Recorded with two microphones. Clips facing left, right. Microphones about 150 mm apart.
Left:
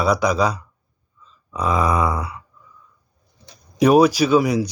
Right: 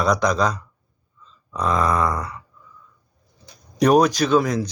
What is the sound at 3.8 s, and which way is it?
Speech, 5° left (ahead or behind).